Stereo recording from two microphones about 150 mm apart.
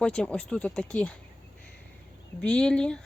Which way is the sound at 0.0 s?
5° left (ahead or behind).